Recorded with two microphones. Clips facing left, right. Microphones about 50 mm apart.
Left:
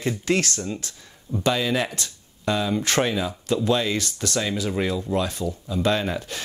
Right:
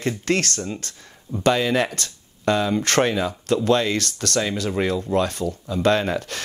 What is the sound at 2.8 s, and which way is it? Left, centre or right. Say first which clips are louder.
Speech: right 3 dB; right.